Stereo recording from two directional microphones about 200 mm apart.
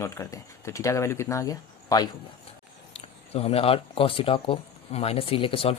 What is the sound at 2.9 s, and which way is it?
Speech, 30° left (ahead or behind).